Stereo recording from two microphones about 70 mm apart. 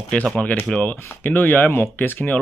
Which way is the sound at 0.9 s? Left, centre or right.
Left.